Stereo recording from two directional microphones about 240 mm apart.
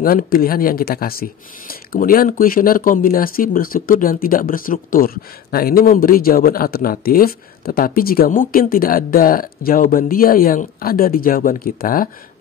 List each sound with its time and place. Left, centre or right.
0.0 s speech: left